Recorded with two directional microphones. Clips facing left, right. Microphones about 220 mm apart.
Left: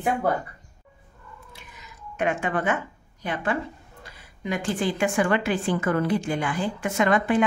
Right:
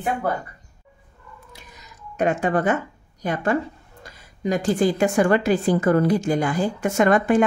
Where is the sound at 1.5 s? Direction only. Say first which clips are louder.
Right 1 dB; 40° right (ahead or behind).